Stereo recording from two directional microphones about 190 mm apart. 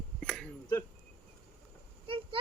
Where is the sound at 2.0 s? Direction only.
30° right (ahead or behind).